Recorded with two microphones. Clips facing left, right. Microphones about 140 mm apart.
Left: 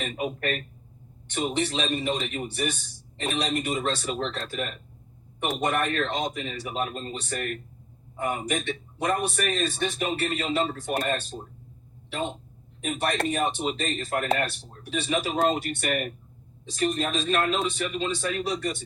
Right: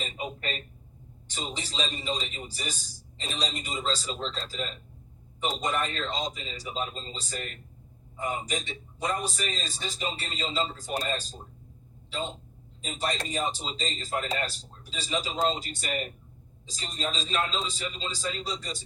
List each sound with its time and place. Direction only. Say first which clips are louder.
0.0 s a man's voice: left 6 dB; 60° left (ahead or behind)